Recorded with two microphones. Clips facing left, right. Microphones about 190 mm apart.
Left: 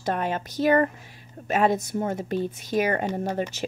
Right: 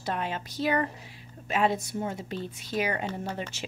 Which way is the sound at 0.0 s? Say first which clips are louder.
Left 5 dB; 50° left (ahead or behind).